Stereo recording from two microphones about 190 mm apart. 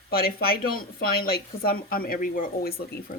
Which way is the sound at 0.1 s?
50° left (ahead or behind).